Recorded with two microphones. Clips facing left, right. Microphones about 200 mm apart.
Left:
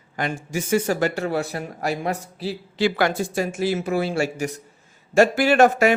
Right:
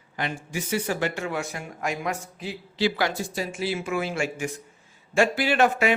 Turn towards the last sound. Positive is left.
turn(degrees=45)  # may be behind; listen again after turning